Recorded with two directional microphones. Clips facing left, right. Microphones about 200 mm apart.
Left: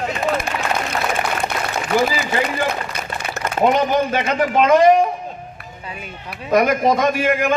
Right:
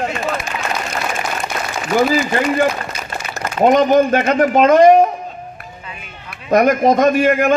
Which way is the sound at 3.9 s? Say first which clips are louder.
Right 5 dB; 50° right (ahead or behind).